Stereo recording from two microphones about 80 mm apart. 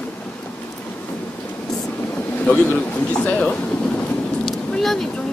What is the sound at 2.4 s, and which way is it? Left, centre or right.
Speech, centre.